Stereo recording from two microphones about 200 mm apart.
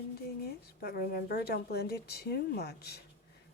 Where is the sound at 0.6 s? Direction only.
50° left (ahead or behind).